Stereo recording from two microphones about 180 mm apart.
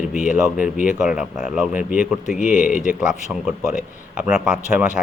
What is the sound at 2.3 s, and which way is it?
Speech, 45° left (ahead or behind).